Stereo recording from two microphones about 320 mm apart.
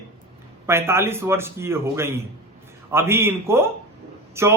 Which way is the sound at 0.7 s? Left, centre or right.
Centre.